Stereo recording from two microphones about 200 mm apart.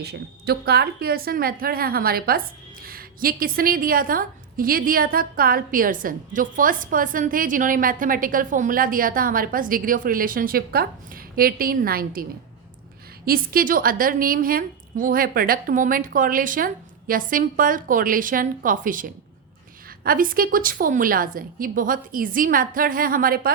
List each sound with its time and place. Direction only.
0.0 s a woman's voice: 55° right (ahead or behind)
13.2 s a woman's voice: 45° right (ahead or behind)